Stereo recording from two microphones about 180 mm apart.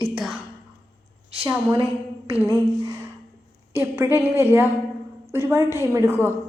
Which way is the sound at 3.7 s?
15° right (ahead or behind).